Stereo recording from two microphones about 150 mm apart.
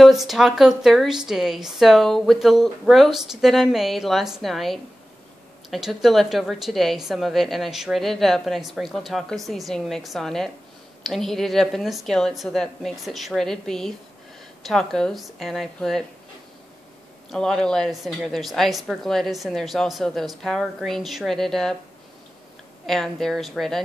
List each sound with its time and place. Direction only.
0.0 s a woman's voice: centre (ahead or behind)
17.3 s a woman's voice: 5° left (ahead or behind)
22.8 s a woman's voice: centre (ahead or behind)